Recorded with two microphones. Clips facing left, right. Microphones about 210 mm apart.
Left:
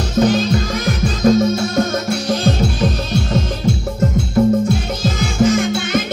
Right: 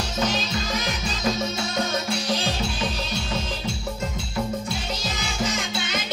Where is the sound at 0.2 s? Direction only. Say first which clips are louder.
Left 12 dB; 50° left (ahead or behind).